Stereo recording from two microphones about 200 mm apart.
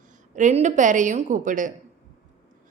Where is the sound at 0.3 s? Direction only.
35° right (ahead or behind).